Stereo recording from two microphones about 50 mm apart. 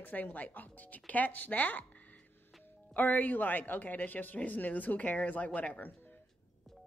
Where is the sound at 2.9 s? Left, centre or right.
Left.